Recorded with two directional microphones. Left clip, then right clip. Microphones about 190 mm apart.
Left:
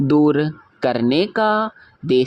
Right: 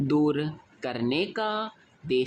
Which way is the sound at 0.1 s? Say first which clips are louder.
Left 9 dB; 35° left (ahead or behind).